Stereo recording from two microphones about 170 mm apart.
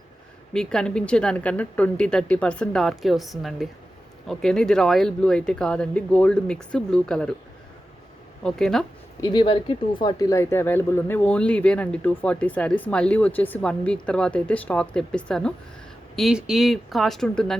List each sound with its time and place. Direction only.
0.5 s speech: 5° left (ahead or behind)
8.4 s speech: 5° left (ahead or behind)
9.2 s speech: 25° left (ahead or behind); by 17.6 s centre (ahead or behind)